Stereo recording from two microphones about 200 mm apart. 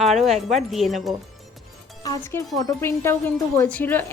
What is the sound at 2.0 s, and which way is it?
Speech, 15° left (ahead or behind).